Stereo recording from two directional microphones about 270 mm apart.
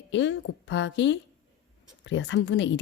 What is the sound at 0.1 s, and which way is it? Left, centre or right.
A woman's voice, left.